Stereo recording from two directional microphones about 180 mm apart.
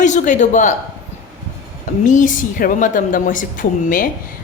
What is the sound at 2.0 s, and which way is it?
Speech, 45° left (ahead or behind).